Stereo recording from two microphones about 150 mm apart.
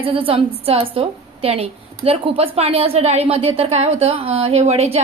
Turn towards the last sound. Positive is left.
turn(degrees=-45)  # may be behind; listen again after turning